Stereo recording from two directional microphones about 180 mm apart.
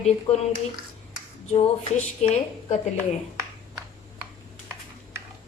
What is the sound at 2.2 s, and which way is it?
Speech, 40° left (ahead or behind).